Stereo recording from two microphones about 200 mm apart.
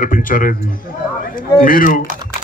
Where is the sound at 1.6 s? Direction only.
45° left (ahead or behind).